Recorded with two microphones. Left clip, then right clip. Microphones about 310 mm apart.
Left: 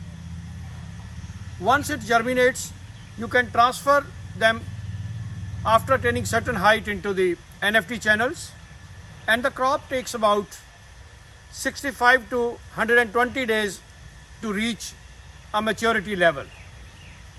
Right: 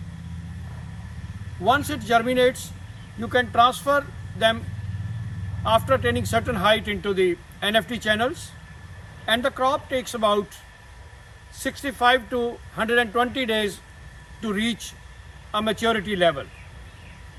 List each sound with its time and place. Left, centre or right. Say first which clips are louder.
1.9 s speech: even; centre
5.6 s speech: left 1 dB; centre
11.8 s speech: left 1 dB; centre